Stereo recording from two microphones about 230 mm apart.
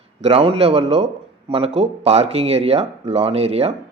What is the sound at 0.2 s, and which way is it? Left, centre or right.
Speech, right.